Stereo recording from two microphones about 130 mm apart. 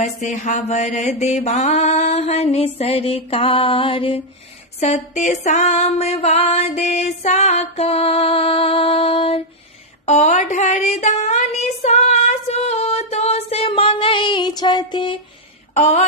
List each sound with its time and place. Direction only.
0.0 s female singing: 65° left (ahead or behind); by 4.2 s 45° left (ahead or behind)
4.7 s female singing: 60° left (ahead or behind); by 9.4 s 45° left (ahead or behind)
10.0 s a sound: 65° left (ahead or behind); by 15.1 s 35° left (ahead or behind)
15.7 s speech: 65° left (ahead or behind)